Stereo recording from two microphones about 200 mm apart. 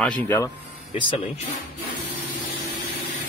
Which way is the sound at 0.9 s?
25° left (ahead or behind).